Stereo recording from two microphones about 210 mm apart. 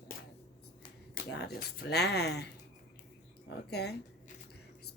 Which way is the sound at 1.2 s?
50° left (ahead or behind).